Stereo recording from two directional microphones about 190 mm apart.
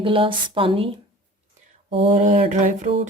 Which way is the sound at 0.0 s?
30° right (ahead or behind).